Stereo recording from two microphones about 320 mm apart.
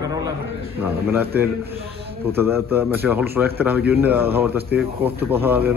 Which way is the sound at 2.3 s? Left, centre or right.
Centre.